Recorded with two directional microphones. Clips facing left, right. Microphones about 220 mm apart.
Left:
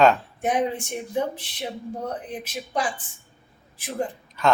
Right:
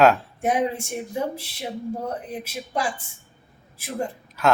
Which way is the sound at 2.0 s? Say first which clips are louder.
Right 1 dB; 10° right (ahead or behind).